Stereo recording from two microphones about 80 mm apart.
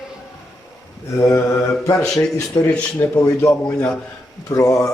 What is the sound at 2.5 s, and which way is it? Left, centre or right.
Speech, left.